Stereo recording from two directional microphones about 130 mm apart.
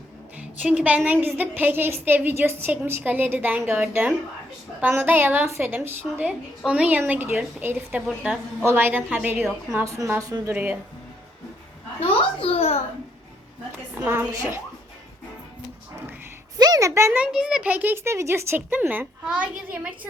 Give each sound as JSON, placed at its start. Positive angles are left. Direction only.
{"t": 0.3, "sound": "a woman's voice", "side_deg": -10}
{"t": 10.5, "sound": "a woman's voice", "side_deg": -15}
{"t": 11.9, "sound": "a child's voice", "side_deg": 45}
{"t": 13.9, "sound": "a woman's voice", "side_deg": -15}
{"t": 16.6, "sound": "a woman's voice", "side_deg": -30}
{"t": 17.3, "sound": "a woman's voice", "side_deg": -5}